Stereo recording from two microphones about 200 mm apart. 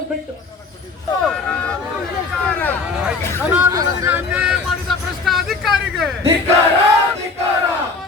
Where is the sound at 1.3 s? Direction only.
5° left (ahead or behind).